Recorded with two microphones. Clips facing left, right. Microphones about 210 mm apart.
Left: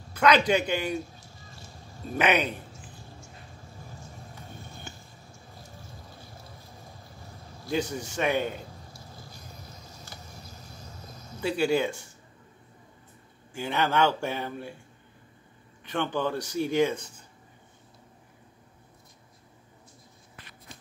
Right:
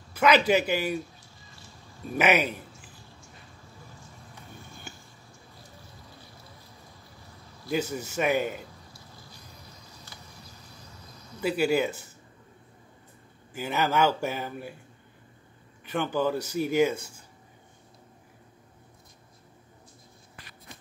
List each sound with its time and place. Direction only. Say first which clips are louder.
0.2 s speech: right 1 dB; 5° right (ahead or behind)
1.2 s a sound: left 4 dB; 45° left (ahead or behind)
2.1 s speech: right 1 dB; 5° right (ahead or behind)
4.0 s music: left 3 dB; 45° left (ahead or behind)
7.7 s speech: right 1 dB; 5° right (ahead or behind)
8.9 s a sound: left 3 dB; 45° left (ahead or behind)
11.4 s speech: right 1 dB; 5° right (ahead or behind)
13.5 s speech: even; 5° right (ahead or behind)
15.8 s speech: right 2 dB; 10° right (ahead or behind)